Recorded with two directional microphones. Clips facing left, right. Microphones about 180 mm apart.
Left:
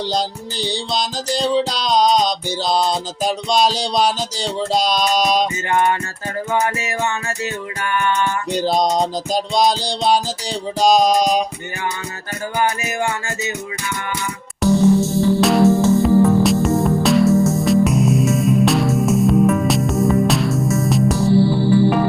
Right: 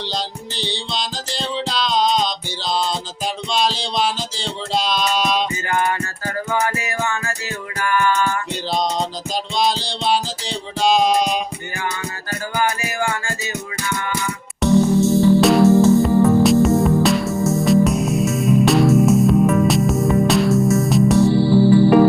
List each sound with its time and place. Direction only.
0.0 s music: 40° left (ahead or behind)
5.6 s music: 25° left (ahead or behind)
8.5 s music: 40° left (ahead or behind)
12.5 s music: 20° left (ahead or behind)
14.6 s music: centre (ahead or behind)